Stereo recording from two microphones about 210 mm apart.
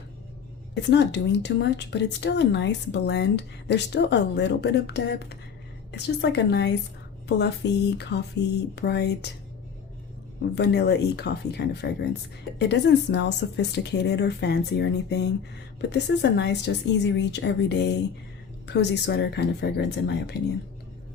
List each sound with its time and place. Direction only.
0.7 s a woman's voice: 55° left (ahead or behind)
10.5 s a woman's voice: 50° left (ahead or behind)